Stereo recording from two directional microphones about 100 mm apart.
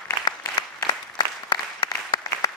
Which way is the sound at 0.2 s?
45° left (ahead or behind).